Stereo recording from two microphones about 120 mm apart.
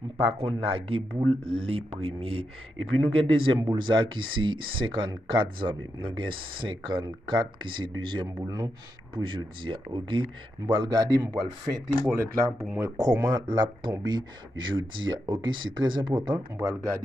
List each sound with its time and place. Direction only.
0.2 s speech: 50° right (ahead or behind); by 12.9 s 20° right (ahead or behind)
12.9 s speech: 30° right (ahead or behind)
16.5 s speech: 25° right (ahead or behind)